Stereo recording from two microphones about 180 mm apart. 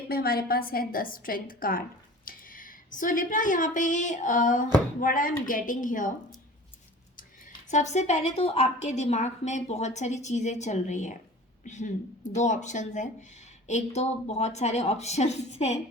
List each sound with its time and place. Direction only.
0.1 s a woman's voice: 55° left (ahead or behind)
7.7 s a woman's voice: 40° left (ahead or behind)